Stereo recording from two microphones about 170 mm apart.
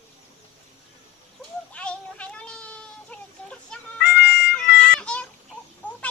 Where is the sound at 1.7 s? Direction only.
5° left (ahead or behind).